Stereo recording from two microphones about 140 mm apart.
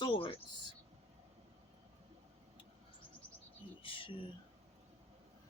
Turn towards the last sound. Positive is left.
turn(degrees=40)  # may be behind; listen again after turning